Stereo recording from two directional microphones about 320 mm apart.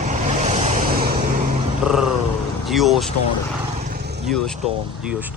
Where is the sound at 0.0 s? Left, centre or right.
Right.